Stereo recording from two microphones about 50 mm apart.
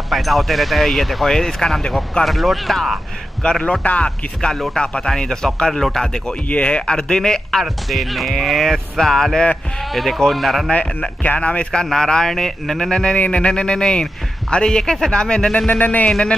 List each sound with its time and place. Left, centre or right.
0.1 s speech: centre
3.4 s speech: centre
3.8 s a man's voice: left
4.4 s speech: centre
6.5 s speech: left
7.6 s speech: centre
10.7 s a man's voice: left
11.8 s a man's voice: centre
15.8 s speech: left
16.1 s speech: centre